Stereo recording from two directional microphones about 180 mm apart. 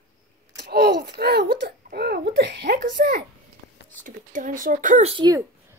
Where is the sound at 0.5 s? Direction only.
65° right (ahead or behind).